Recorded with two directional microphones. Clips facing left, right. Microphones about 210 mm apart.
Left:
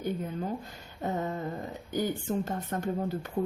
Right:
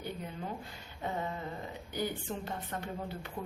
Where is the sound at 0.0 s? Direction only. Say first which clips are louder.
Left 8 dB; 45° left (ahead or behind).